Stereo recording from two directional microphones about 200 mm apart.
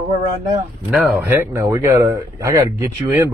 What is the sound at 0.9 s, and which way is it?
Speech, 10° right (ahead or behind).